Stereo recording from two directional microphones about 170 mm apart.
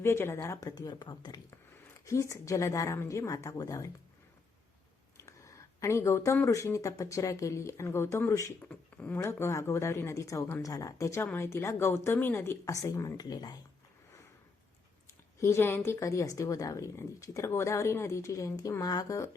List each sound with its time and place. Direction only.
0.0 s a woman's voice: 15° left (ahead or behind)
5.1 s speech: 15° left (ahead or behind)
15.4 s speech: 15° left (ahead or behind)